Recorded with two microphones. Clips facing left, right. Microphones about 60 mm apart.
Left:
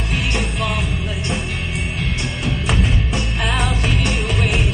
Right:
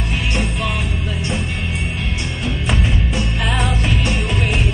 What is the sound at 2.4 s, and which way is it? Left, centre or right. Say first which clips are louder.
Music: even; centre.